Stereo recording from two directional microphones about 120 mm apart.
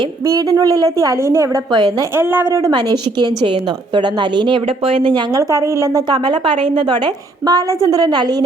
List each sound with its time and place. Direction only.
0.3 s a woman's voice: 30° right (ahead or behind)
1.7 s a woman's voice: 35° right (ahead or behind)
2.1 s a woman's voice: 20° right (ahead or behind); by 5.2 s 45° right (ahead or behind)
5.3 s a woman's voice: 25° right (ahead or behind)
6.2 s a woman's voice: 45° right (ahead or behind)